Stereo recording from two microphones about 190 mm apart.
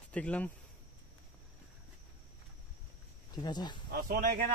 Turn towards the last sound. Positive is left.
turn(degrees=-45)  # may be behind; listen again after turning